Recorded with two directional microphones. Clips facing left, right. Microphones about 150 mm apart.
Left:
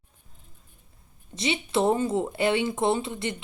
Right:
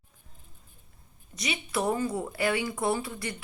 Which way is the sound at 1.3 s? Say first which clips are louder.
Left 6 dB; 25° left (ahead or behind).